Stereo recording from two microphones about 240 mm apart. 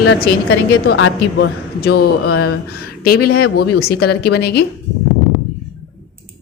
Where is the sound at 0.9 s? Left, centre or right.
Left.